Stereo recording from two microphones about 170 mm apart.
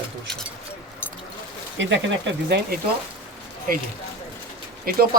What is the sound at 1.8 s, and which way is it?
Speech, 90° right.